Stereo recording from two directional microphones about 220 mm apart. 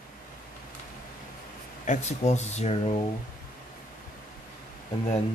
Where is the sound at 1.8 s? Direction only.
30° left (ahead or behind).